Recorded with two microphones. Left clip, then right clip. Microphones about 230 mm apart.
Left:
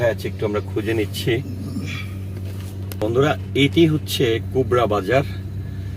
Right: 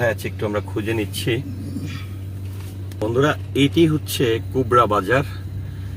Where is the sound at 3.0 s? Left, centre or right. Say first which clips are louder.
Even; centre.